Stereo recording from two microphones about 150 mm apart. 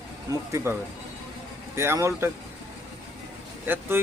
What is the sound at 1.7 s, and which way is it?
Speech, 15° right (ahead or behind).